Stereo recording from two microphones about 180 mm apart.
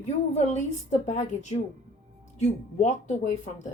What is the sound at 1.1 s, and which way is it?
A woman's voice, 40° left (ahead or behind).